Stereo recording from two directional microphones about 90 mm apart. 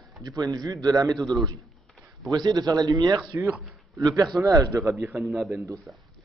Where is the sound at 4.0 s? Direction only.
40° right (ahead or behind).